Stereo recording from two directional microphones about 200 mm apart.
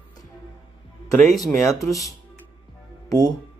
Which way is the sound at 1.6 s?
15° left (ahead or behind).